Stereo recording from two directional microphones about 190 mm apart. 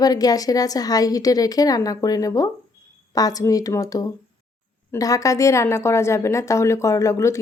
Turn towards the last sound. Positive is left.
turn(degrees=15)  # may be behind; listen again after turning